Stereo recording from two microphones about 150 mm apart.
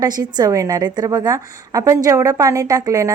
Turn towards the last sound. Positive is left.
turn(degrees=-20)  # may be behind; listen again after turning